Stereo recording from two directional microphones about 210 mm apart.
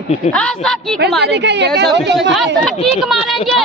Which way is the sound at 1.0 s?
50° right (ahead or behind).